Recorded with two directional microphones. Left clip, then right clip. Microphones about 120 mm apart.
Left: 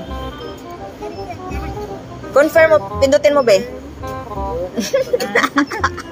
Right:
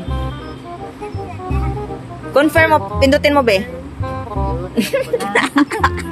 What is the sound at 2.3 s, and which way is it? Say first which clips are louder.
Speech: left 1 dB; 60° right (ahead or behind).